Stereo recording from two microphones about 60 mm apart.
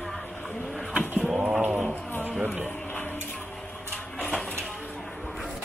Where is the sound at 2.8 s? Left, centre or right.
Left.